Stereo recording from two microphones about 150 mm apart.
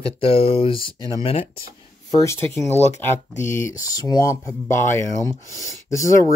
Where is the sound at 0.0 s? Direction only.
40° left (ahead or behind).